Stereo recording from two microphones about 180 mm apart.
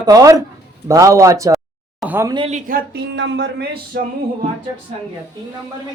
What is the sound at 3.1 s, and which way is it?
Speech, 80° right.